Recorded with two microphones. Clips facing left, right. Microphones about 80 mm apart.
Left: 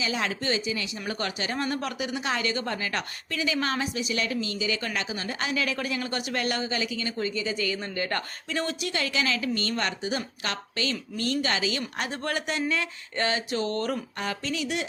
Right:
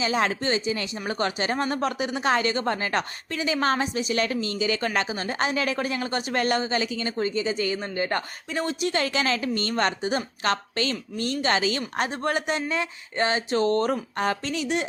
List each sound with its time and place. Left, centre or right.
0.0 s speech: right; by 8.7 s centre
8.8 s speech: right
11.2 s speech: right
11.5 s speech: right
11.9 s speech: right